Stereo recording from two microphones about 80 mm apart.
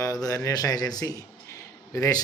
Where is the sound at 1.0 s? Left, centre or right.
Left.